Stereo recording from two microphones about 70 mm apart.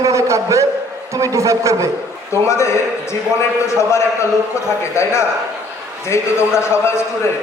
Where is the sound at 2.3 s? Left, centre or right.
Left.